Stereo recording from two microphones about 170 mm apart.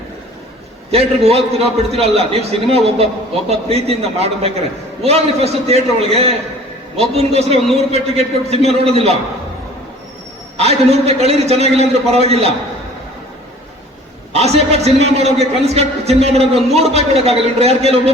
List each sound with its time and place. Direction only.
0.9 s a man's voice: 35° right (ahead or behind)
10.6 s a man's voice: 40° right (ahead or behind)
14.3 s a man's voice: 40° right (ahead or behind)